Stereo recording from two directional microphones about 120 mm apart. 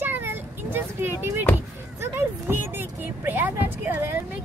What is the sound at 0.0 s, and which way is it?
Vehicle, 15° right (ahead or behind).